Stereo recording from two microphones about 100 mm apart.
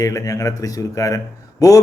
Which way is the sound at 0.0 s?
35° left (ahead or behind).